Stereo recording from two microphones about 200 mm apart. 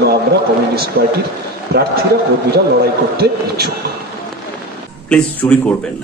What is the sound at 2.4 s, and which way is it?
A man's voice, 50° right (ahead or behind).